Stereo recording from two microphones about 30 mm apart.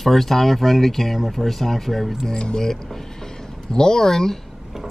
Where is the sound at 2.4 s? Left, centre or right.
Left.